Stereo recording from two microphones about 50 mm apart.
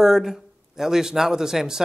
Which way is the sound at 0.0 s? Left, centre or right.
Centre.